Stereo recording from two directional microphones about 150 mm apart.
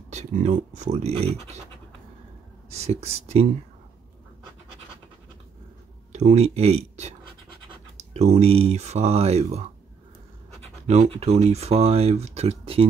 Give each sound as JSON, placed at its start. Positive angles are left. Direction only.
{"t": 0.1, "sound": "speech", "side_deg": -50}
{"t": 2.7, "sound": "speech", "side_deg": -45}
{"t": 6.1, "sound": "speech", "side_deg": -50}